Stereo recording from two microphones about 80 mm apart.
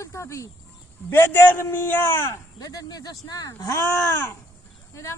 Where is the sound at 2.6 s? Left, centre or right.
Left.